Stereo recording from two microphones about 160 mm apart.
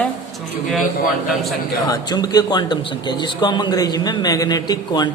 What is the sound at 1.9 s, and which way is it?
A man's voice, 25° left (ahead or behind).